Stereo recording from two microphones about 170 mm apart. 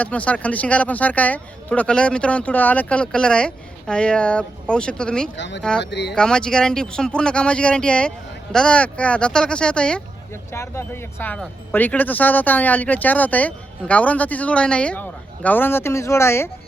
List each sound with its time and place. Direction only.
0.0 s speech: 10° left (ahead or behind)
5.4 s speech: 90° left
6.1 s speech: 5° left (ahead or behind)